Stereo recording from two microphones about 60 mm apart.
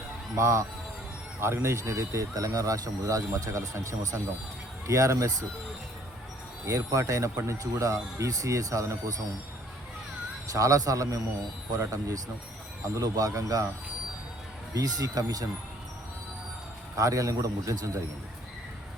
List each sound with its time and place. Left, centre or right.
0.3 s speech: right
1.4 s speech: right
2.3 s speech: right
6.7 s speech: right
10.5 s speech: right
12.8 s speech: right
14.7 s speech: right
16.9 s speech: right